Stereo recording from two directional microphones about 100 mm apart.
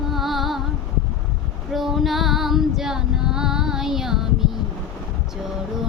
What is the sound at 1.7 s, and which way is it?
Female singing, centre (ahead or behind).